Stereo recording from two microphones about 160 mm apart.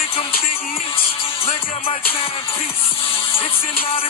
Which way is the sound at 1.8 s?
65° left (ahead or behind).